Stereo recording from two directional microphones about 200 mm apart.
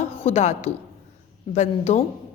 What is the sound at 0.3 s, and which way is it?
A woman's voice, 30° left (ahead or behind).